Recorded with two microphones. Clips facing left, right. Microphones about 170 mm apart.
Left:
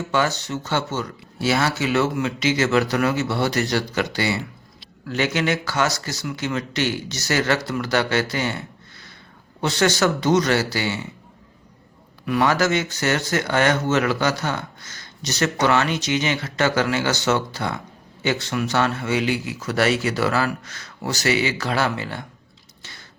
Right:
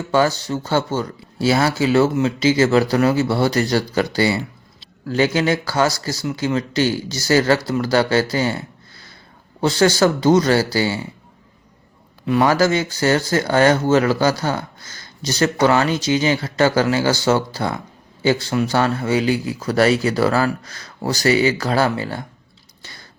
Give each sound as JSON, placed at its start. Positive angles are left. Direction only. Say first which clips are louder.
{"t": 0.1, "sound": "speech", "louder": "right 6 dB", "side_deg": -35}
{"t": 12.2, "sound": "speech", "louder": "right 4 dB", "side_deg": -30}
{"t": 22.8, "sound": "a sound", "louder": "right 2 dB", "side_deg": -40}